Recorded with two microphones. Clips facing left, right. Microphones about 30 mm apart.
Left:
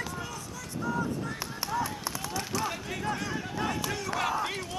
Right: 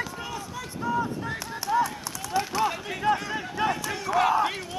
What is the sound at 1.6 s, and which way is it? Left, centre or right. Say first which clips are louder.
Run: right 7 dB; centre.